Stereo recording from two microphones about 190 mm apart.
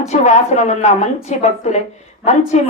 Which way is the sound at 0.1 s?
35° left (ahead or behind).